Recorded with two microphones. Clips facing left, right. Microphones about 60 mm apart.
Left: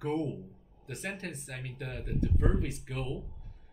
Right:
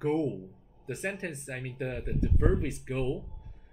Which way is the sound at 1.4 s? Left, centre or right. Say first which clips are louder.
Right 4 dB; right.